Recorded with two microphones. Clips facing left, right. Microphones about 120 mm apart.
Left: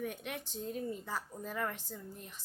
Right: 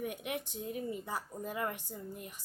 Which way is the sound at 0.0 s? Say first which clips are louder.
Right 2 dB; 15° right (ahead or behind).